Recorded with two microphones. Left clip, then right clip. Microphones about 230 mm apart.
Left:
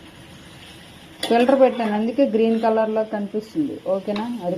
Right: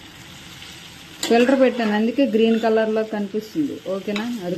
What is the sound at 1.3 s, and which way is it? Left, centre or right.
Speech, centre.